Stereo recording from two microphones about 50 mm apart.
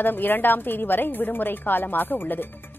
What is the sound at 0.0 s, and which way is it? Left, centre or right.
A woman's voice, left.